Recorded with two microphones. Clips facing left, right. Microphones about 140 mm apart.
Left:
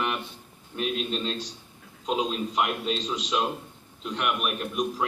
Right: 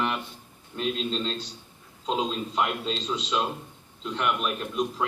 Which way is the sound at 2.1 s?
15° left (ahead or behind).